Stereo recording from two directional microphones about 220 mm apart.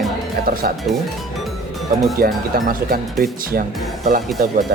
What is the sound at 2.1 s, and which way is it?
Speech, 40° right (ahead or behind).